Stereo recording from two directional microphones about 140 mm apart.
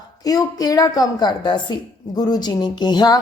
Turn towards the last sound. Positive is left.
turn(degrees=30)  # may be behind; listen again after turning